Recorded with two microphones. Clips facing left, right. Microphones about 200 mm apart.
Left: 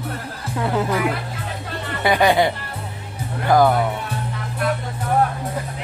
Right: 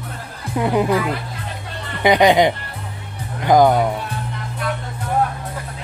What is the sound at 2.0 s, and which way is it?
Speech, 20° right (ahead or behind).